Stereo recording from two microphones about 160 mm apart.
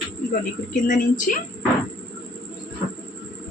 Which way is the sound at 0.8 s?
55° left (ahead or behind).